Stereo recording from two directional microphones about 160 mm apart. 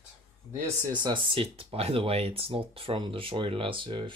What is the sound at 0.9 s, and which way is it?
Speech, 30° right (ahead or behind).